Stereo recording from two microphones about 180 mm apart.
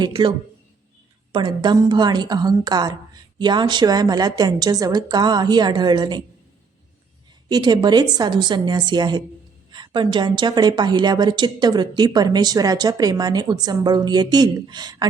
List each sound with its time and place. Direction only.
0.0 s a woman's voice: 25° right (ahead or behind)
7.4 s a woman's voice: 25° right (ahead or behind)